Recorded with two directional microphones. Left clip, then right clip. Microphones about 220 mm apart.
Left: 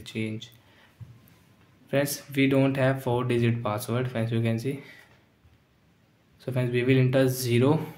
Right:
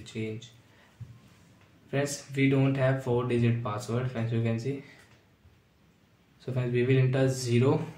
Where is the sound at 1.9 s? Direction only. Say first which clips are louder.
Left 4 dB; 40° left (ahead or behind).